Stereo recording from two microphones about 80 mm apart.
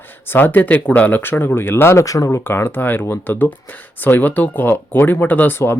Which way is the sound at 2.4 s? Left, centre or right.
Left.